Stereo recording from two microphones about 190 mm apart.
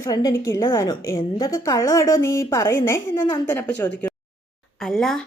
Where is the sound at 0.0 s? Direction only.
20° left (ahead or behind).